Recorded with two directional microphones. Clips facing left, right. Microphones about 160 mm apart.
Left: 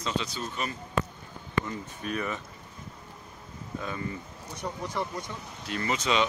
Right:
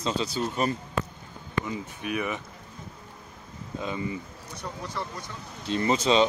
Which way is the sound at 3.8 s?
15° right (ahead or behind).